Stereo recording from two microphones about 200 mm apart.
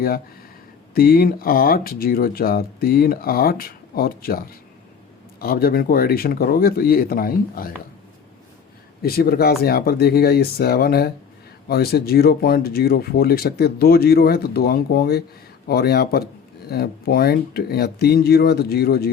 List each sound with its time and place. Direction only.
0.9 s speech: 50° left (ahead or behind)
9.0 s speech: 50° left (ahead or behind)